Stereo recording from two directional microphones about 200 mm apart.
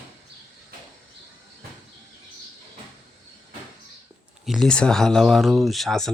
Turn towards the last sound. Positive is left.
turn(degrees=0)  # may be behind; listen again after turning